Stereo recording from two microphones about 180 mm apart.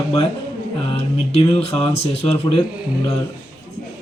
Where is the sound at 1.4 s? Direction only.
30° left (ahead or behind).